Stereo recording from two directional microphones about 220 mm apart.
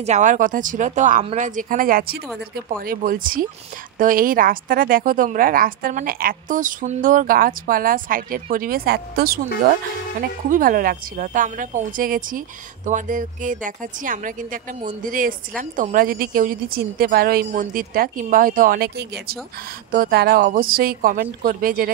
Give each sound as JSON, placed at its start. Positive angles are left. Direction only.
{"t": 0.0, "sound": "a woman's voice", "side_deg": -35}
{"t": 10.5, "sound": "a woman's voice", "side_deg": -40}